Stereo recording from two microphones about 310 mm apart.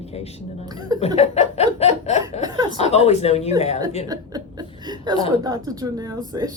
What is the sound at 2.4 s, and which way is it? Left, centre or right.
Speech, centre.